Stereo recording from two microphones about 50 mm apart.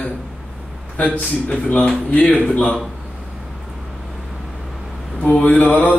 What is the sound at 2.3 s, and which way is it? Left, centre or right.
Speech, left.